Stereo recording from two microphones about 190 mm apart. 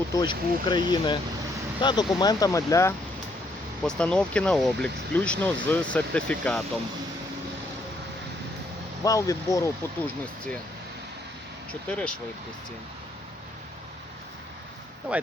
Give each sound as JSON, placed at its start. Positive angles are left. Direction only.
{"t": 0.1, "sound": "speech", "side_deg": 20}
{"t": 3.8, "sound": "speech", "side_deg": 5}
{"t": 9.0, "sound": "speech", "side_deg": 15}
{"t": 11.7, "sound": "speech", "side_deg": 5}
{"t": 15.1, "sound": "speech", "side_deg": -5}